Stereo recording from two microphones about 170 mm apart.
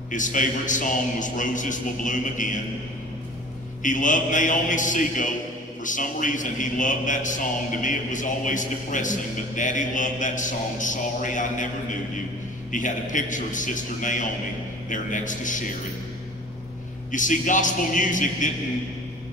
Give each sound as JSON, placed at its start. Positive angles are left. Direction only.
{"t": 0.1, "sound": "a man's voice", "side_deg": 50}
{"t": 3.8, "sound": "a man's voice", "side_deg": 50}
{"t": 17.1, "sound": "a man's voice", "side_deg": 50}